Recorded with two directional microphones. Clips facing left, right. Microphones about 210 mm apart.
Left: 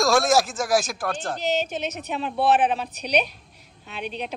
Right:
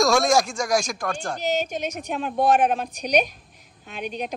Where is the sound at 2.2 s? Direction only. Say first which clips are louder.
Right 1 dB; 45° right (ahead or behind).